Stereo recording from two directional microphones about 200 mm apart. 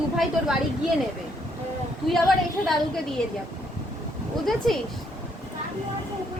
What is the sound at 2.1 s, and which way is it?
Speech, centre (ahead or behind).